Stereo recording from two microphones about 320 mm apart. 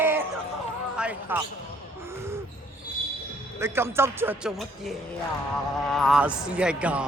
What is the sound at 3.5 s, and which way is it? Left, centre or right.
A man's voice, centre.